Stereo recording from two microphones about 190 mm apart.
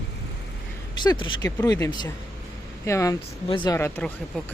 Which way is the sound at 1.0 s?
25° left (ahead or behind).